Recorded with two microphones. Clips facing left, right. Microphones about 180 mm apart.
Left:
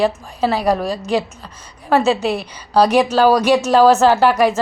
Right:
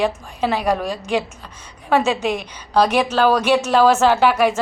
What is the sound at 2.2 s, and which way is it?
Speech, 35° left (ahead or behind).